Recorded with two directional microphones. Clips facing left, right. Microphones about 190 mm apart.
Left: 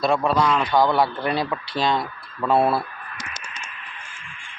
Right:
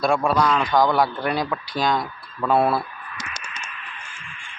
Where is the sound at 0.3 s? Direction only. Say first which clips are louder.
Even; centre (ahead or behind).